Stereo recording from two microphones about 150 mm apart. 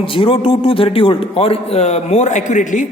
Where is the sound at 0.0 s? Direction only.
35° left (ahead or behind).